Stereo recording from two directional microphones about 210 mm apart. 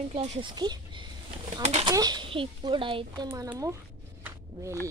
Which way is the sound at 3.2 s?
15° right (ahead or behind).